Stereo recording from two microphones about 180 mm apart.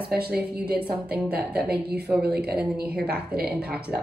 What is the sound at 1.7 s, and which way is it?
Speech, 60° right (ahead or behind).